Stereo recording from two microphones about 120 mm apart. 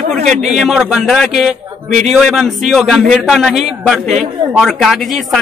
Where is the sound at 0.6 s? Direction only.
5° right (ahead or behind).